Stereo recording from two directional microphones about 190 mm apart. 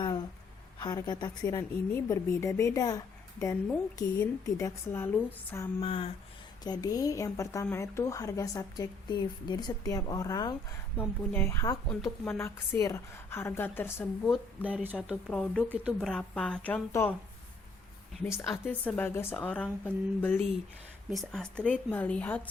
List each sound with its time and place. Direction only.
0.8 s a woman's voice: 20° left (ahead or behind)
5.8 s a woman's voice: 30° left (ahead or behind)
6.7 s a woman's voice: 20° left (ahead or behind)
14.6 s a woman's voice: 5° right (ahead or behind); by 17.2 s 10° left (ahead or behind)
18.5 s a woman's voice: 10° left (ahead or behind)
21.1 s a woman's voice: centre (ahead or behind)